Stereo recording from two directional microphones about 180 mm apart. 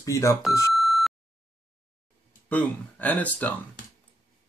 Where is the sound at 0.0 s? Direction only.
15° left (ahead or behind).